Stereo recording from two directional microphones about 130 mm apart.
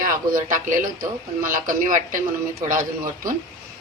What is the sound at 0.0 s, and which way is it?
A man's voice, 90° right.